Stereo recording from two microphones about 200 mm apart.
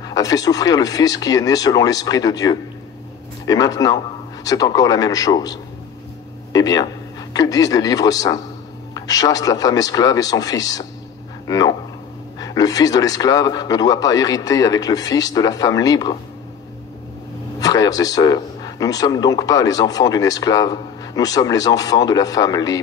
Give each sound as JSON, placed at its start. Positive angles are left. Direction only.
{"t": 0.0, "sound": "a man's voice", "side_deg": 20}
{"t": 17.6, "sound": "a man's voice", "side_deg": 20}